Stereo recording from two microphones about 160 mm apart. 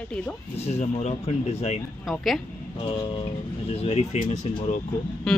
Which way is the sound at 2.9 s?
35° left (ahead or behind).